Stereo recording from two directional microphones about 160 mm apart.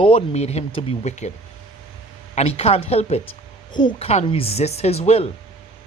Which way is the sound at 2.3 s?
40° left (ahead or behind).